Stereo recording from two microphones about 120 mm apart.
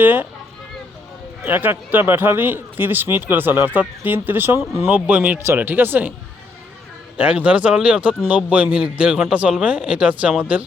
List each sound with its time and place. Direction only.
0.0 s speech: 15° right (ahead or behind)
1.5 s speech: 15° right (ahead or behind)
7.2 s speech: 10° right (ahead or behind)